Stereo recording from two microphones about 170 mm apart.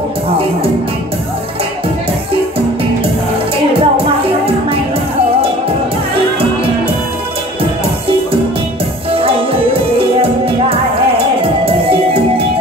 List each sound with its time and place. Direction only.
3.8 s music: 35° right (ahead or behind)
9.1 s music: 35° right (ahead or behind)
11.6 s music: 35° right (ahead or behind)